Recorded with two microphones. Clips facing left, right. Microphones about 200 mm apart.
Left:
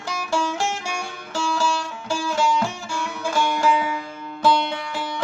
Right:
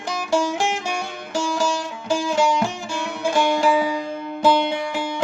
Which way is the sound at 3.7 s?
35° right (ahead or behind).